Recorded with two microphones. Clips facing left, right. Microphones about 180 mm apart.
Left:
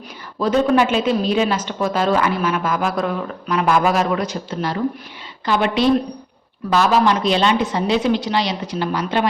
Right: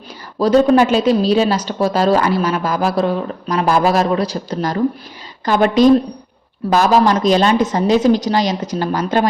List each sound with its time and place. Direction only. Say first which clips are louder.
0.3 s a woman's voice: right 5 dB; 35° right (ahead or behind)